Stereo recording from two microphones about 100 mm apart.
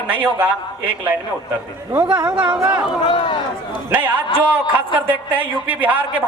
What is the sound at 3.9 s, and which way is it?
A man's voice, 20° right (ahead or behind).